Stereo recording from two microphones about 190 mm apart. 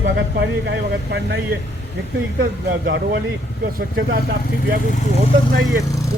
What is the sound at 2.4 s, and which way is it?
Speech, 60° right (ahead or behind).